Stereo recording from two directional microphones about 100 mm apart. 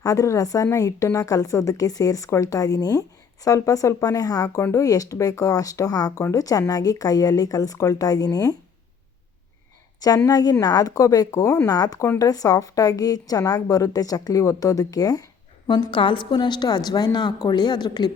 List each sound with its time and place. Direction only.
0.0 s a woman's voice: 35° left (ahead or behind)
10.2 s a woman's voice: 40° left (ahead or behind)
15.6 s a woman's voice: 55° left (ahead or behind)